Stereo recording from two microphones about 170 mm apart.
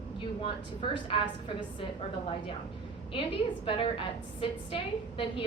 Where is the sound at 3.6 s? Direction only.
30° left (ahead or behind).